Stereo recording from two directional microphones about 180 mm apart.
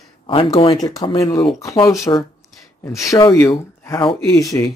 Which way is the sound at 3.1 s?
20° left (ahead or behind).